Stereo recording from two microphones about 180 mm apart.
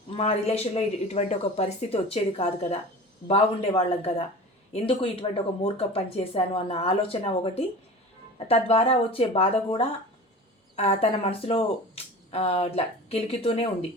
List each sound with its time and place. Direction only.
0.2 s speech: 35° left (ahead or behind)
10.8 s speech: 35° left (ahead or behind)